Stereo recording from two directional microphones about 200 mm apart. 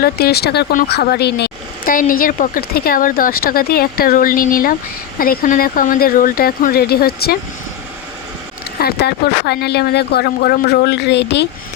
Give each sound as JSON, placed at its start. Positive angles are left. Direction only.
{"t": 0.0, "sound": "a woman's voice", "side_deg": 50}
{"t": 8.8, "sound": "speech", "side_deg": 55}